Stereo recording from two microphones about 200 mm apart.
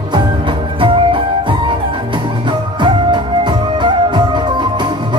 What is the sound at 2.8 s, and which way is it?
Music, 20° right (ahead or behind).